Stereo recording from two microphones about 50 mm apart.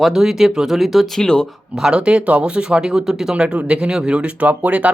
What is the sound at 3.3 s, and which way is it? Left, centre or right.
Speech, right.